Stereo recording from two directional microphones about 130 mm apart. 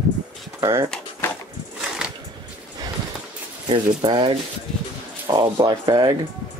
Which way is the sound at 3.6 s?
40° right (ahead or behind).